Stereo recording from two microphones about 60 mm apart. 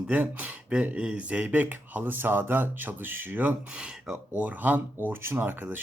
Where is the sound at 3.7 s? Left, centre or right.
Centre.